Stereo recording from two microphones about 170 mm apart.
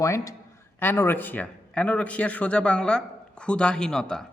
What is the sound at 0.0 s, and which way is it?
Speech, 20° left (ahead or behind).